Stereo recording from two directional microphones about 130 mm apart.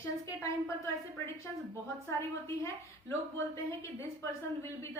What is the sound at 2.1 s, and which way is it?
A woman's voice, 20° left (ahead or behind).